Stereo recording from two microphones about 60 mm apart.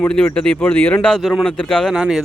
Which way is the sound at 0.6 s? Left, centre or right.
Left.